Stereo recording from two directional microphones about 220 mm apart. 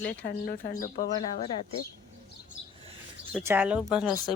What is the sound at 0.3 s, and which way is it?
Speech, 40° left (ahead or behind).